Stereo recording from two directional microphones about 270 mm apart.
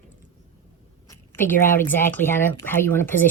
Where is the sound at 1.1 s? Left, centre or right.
Centre.